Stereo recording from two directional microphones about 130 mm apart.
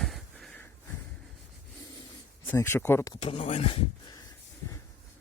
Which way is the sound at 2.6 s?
20° left (ahead or behind).